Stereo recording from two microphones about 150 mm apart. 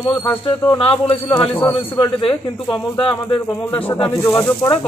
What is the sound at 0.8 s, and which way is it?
Speech, 35° left (ahead or behind).